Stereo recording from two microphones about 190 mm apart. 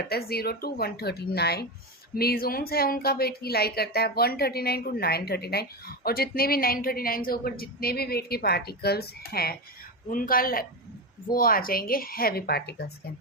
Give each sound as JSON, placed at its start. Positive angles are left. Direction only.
{"t": 0.1, "sound": "a woman's voice", "side_deg": 55}